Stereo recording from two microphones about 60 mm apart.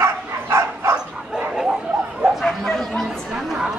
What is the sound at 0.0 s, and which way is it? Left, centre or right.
Bow-wow, right.